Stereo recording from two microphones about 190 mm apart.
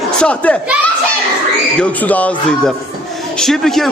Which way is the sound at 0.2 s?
5° left (ahead or behind).